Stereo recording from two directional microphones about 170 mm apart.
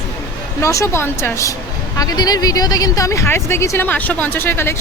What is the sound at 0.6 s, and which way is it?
Speech, 20° left (ahead or behind).